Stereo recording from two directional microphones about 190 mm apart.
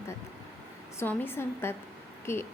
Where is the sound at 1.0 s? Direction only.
10° left (ahead or behind).